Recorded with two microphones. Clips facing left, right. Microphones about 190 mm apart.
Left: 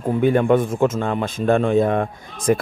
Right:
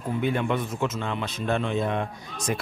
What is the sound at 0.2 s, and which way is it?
Speech, 50° left (ahead or behind).